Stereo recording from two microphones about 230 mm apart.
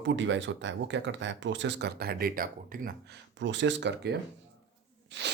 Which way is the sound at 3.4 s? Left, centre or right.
Right.